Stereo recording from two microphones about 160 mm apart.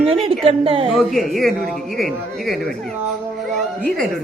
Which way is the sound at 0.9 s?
Centre (ahead or behind).